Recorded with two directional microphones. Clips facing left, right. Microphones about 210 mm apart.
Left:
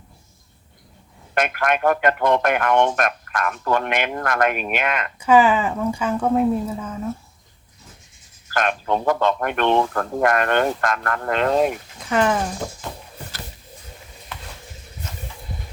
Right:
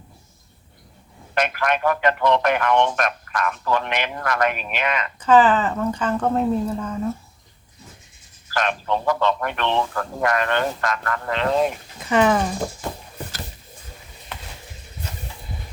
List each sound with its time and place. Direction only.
1.4 s speech: 50° left (ahead or behind)
5.2 s speech: 10° left (ahead or behind)
8.4 s speech: 50° left (ahead or behind)
11.9 s speech: centre (ahead or behind)